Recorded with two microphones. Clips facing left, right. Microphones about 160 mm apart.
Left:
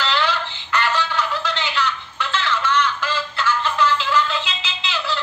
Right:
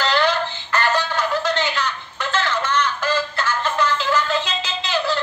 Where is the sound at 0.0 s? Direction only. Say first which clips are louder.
Right 3 dB; 45° right (ahead or behind).